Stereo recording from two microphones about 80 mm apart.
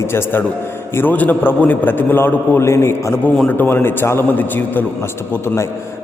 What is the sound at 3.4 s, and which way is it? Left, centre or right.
A man's voice, left.